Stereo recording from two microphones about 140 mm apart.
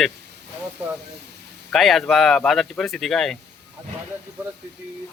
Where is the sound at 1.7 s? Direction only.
Centre (ahead or behind).